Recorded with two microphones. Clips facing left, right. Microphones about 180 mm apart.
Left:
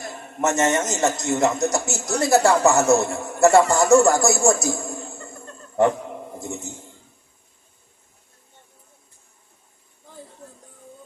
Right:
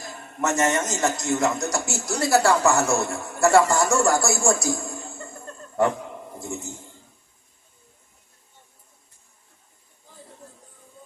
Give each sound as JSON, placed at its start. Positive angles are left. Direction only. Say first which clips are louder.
{"t": 0.4, "sound": "a man's voice", "louder": "left 2 dB", "side_deg": 20}